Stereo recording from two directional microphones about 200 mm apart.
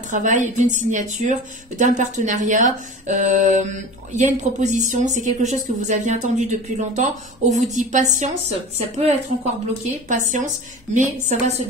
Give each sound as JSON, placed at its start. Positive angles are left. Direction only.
{"t": 0.1, "sound": "a woman's voice", "side_deg": -40}